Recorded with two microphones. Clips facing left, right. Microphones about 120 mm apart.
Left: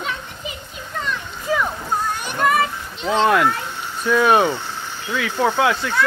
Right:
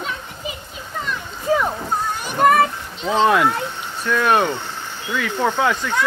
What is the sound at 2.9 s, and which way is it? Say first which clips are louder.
Speech: even; centre (ahead or behind).